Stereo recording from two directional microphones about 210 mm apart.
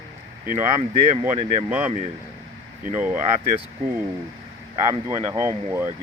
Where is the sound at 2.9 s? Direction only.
5° right (ahead or behind).